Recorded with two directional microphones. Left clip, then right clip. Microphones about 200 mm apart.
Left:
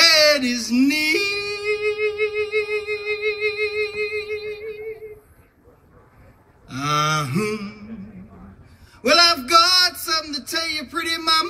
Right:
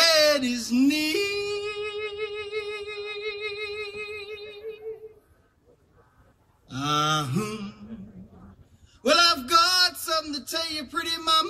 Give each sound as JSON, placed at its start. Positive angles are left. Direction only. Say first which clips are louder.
{"t": 0.0, "sound": "music", "louder": "left 5 dB", "side_deg": 20}
{"t": 6.7, "sound": "gasp", "louder": "left 4 dB", "side_deg": 20}
{"t": 9.0, "sound": "a sound", "louder": "left 5 dB", "side_deg": 20}